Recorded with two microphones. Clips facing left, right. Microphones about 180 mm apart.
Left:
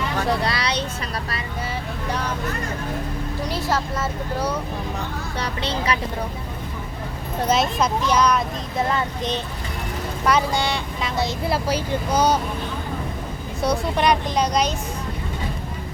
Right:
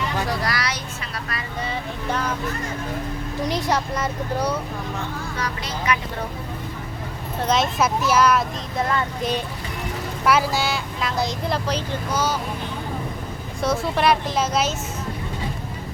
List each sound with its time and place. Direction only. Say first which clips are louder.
0.3 s speech: left 3 dB; 25° left (ahead or behind)
5.4 s speech: left 4 dB; 30° left (ahead or behind)
7.4 s speech: even; centre (ahead or behind)
10.2 s speech: even; 5° right (ahead or behind); by 12.4 s 15° left (ahead or behind)
13.6 s speech: even; centre (ahead or behind)